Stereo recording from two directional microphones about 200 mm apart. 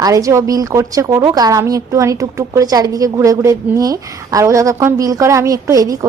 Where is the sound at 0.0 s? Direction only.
15° right (ahead or behind).